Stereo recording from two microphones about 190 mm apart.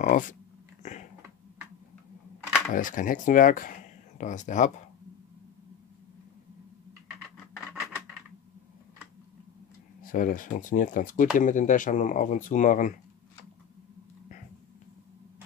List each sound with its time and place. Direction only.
0.0 s speech: 40° left (ahead or behind)
0.8 s cat: 40° left (ahead or behind)
2.7 s speech: 45° left (ahead or behind)
10.0 s speech: 45° left (ahead or behind)